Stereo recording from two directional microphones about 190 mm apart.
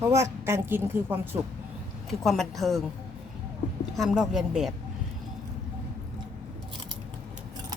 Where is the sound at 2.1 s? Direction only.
Centre (ahead or behind).